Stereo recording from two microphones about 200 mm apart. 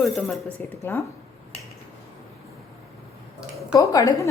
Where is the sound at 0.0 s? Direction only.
Centre (ahead or behind).